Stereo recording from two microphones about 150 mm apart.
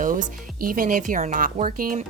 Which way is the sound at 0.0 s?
65° right (ahead or behind).